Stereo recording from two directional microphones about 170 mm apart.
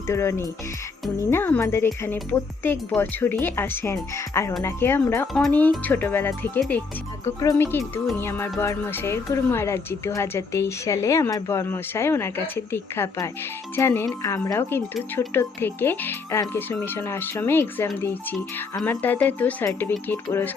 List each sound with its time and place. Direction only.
0.1 s speech: 15° left (ahead or behind)